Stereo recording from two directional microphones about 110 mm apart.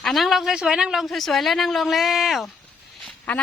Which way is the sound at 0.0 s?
Centre (ahead or behind).